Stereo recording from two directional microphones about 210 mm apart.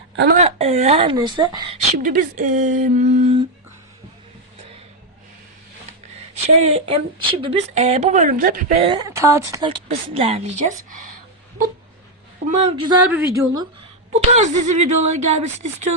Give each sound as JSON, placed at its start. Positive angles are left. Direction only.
{"t": 0.3, "sound": "a woman's voice", "side_deg": -30}
{"t": 2.0, "sound": "a woman's voice", "side_deg": -40}
{"t": 6.4, "sound": "a woman's voice", "side_deg": -30}
{"t": 9.6, "sound": "a woman's voice", "side_deg": -25}
{"t": 12.5, "sound": "a woman's voice", "side_deg": -30}
{"t": 13.1, "sound": "a woman's voice", "side_deg": -10}
{"t": 14.1, "sound": "a woman's voice", "side_deg": -35}